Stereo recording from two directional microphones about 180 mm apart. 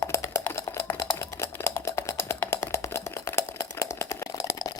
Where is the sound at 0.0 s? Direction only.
15° left (ahead or behind).